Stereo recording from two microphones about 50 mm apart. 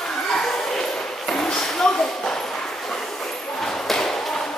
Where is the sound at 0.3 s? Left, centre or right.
Centre.